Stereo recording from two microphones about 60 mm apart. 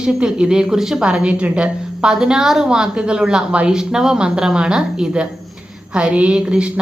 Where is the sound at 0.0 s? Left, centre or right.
Centre.